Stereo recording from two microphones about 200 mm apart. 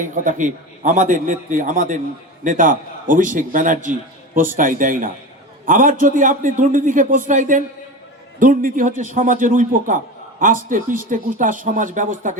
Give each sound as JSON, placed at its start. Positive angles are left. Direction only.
{"t": 0.0, "sound": "a man's voice", "side_deg": -40}